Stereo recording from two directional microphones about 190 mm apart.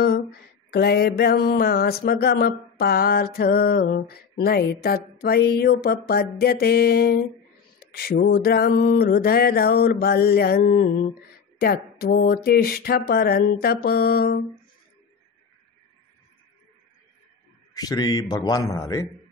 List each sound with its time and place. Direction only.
0.7 s mantra: 55° left (ahead or behind)
7.8 s a sound: 55° left (ahead or behind)
17.7 s a man's voice: 20° left (ahead or behind)